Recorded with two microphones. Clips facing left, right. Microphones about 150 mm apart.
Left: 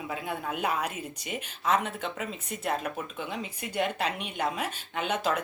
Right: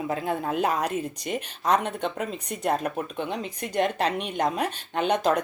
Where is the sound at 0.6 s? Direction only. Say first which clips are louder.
Right 4 dB; 40° right (ahead or behind).